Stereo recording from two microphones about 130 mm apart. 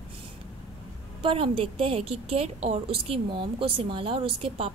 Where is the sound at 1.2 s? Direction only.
45° right (ahead or behind).